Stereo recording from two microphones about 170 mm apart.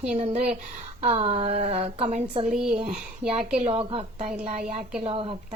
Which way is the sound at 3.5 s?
35° right (ahead or behind).